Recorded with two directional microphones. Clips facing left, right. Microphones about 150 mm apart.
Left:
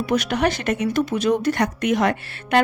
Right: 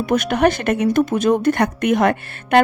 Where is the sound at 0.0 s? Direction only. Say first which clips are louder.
Right 4 dB; 50° right (ahead or behind).